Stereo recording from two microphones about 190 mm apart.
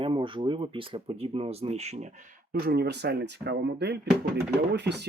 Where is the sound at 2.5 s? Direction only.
55° right (ahead or behind).